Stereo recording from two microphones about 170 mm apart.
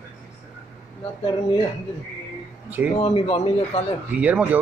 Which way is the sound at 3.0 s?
35° left (ahead or behind).